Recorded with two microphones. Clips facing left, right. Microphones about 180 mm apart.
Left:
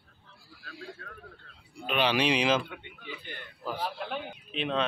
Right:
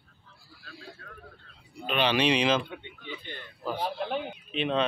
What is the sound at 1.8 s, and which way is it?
Speech, 5° left (ahead or behind).